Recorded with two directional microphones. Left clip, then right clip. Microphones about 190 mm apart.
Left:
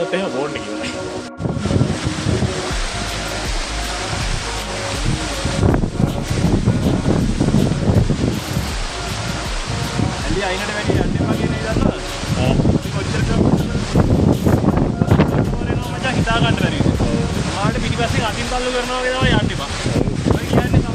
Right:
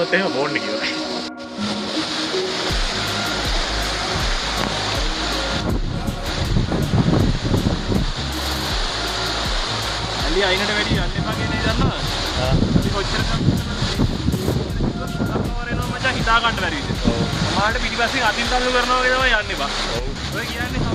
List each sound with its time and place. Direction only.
16.0 s speech: 35° left (ahead or behind)